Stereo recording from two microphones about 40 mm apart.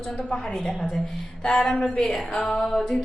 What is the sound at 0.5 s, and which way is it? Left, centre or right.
Speech, centre.